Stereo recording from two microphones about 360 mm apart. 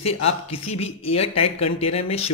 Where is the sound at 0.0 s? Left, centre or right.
Centre.